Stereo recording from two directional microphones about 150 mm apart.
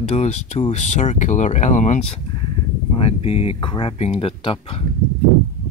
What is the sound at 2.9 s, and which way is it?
Speech, 45° left (ahead or behind).